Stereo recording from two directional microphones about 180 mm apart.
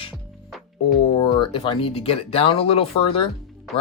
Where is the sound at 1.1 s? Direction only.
25° left (ahead or behind).